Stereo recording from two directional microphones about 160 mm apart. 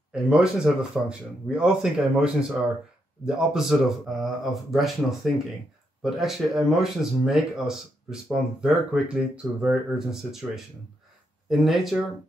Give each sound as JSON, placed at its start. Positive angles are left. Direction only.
{"t": 0.1, "sound": "speech", "side_deg": -5}